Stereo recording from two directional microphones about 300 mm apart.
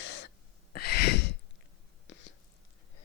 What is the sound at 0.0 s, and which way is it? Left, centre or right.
Gasp, left.